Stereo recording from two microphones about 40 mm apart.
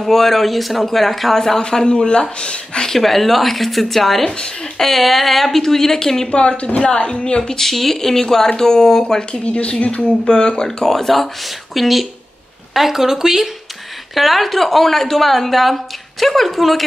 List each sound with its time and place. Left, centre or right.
0.0 s a woman's voice: centre
1.6 s speech: centre
2.9 s a woman's voice: centre
6.3 s speech: left
6.8 s speech: left
7.4 s speech: centre
9.4 s speech: left
10.2 s speech: centre
10.9 s a woman's voice: centre
14.1 s a woman's voice: centre